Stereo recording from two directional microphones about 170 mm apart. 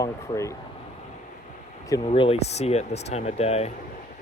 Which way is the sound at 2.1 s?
35° left (ahead or behind).